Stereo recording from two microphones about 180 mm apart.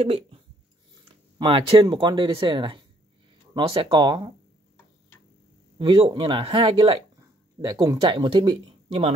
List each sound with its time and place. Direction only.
0.0 s speech: 35° right (ahead or behind)
1.4 s speech: 30° right (ahead or behind)
5.8 s speech: 30° right (ahead or behind)
7.6 s speech: 20° right (ahead or behind)